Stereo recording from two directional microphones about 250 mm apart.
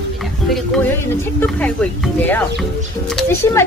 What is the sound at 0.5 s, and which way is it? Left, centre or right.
Speech, centre.